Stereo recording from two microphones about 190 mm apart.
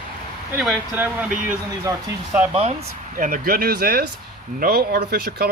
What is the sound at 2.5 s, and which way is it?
Speech, 35° right (ahead or behind).